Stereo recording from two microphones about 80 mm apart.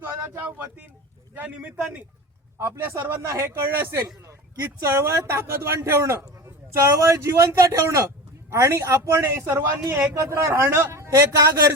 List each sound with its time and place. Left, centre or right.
0.0 s a sound: right
1.5 s a man's voice: centre
3.0 s a man's voice: right